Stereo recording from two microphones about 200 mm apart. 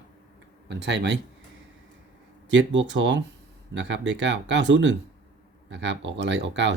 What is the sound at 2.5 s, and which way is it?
Speech, 65° right (ahead or behind).